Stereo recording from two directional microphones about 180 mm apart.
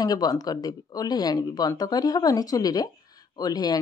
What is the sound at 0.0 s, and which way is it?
Speech, 20° left (ahead or behind).